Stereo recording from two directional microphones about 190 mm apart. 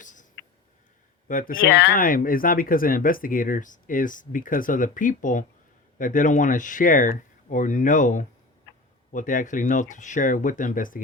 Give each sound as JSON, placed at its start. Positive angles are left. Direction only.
{"t": 0.0, "sound": "a sound", "side_deg": 40}
{"t": 1.3, "sound": "speech", "side_deg": 45}
{"t": 1.7, "sound": "speech", "side_deg": 55}